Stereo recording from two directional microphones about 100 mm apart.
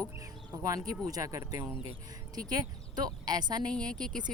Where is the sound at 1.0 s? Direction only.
35° right (ahead or behind).